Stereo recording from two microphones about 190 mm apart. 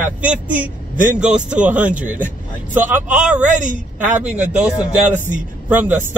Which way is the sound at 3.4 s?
40° right (ahead or behind).